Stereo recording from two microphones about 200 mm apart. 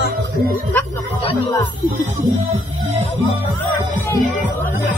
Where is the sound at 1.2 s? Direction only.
30° left (ahead or behind).